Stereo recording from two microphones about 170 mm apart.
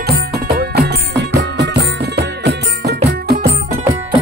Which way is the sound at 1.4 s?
90° right.